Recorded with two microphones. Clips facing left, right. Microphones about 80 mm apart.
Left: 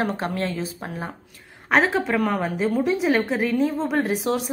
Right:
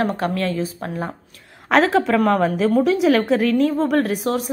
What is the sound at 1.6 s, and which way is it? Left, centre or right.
Speech, right.